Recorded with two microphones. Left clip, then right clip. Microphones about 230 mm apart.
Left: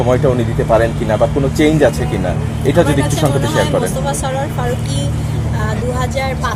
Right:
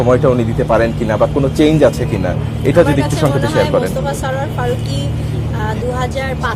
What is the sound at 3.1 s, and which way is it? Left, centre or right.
Speech, right.